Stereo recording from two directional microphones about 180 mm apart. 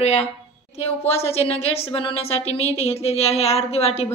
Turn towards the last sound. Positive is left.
turn(degrees=35)  # may be behind; listen again after turning